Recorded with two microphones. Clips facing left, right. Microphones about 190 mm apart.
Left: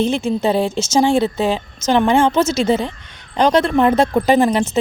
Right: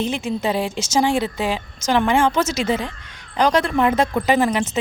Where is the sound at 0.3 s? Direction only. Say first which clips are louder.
Left 5 dB; 25° left (ahead or behind).